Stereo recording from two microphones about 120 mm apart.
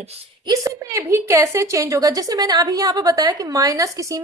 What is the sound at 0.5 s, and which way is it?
A woman's voice, 25° right (ahead or behind).